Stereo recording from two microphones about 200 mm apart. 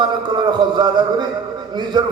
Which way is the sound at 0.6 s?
20° right (ahead or behind).